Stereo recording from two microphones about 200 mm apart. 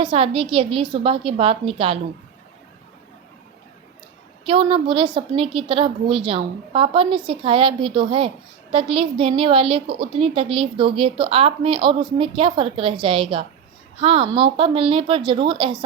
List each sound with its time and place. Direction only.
0.0 s a woman's voice: 25° right (ahead or behind)
4.4 s a woman's voice: 25° right (ahead or behind)